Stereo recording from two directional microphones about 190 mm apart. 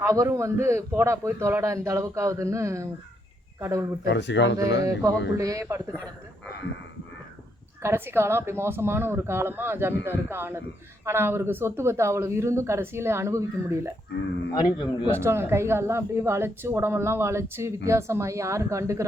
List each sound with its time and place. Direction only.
0.0 s speech: 15° right (ahead or behind)
4.0 s speech: 65° left (ahead or behind)
4.8 s speech: 15° right (ahead or behind)
7.8 s speech: 15° right (ahead or behind)
14.5 s a man's voice: 25° left (ahead or behind)
15.1 s speech: 15° right (ahead or behind)